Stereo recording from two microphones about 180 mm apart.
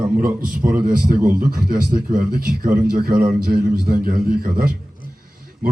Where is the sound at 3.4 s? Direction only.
55° right (ahead or behind).